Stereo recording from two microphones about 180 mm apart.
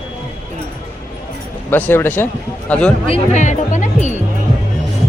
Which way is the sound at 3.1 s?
40° left (ahead or behind).